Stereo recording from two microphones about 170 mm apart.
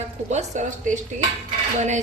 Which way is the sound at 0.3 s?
45° right (ahead or behind).